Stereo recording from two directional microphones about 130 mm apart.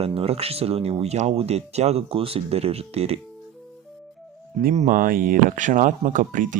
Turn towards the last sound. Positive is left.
turn(degrees=-90)